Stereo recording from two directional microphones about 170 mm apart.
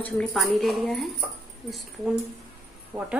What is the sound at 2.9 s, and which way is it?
Speech, 20° right (ahead or behind).